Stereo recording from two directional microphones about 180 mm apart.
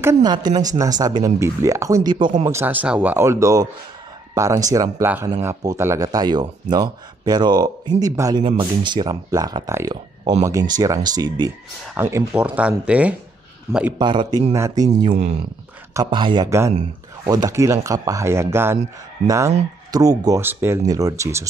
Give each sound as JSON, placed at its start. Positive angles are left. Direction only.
{"t": 0.0, "sound": "speech", "side_deg": -20}
{"t": 13.9, "sound": "speech", "side_deg": -25}
{"t": 14.5, "sound": "speech", "side_deg": -15}
{"t": 15.9, "sound": "speech", "side_deg": -25}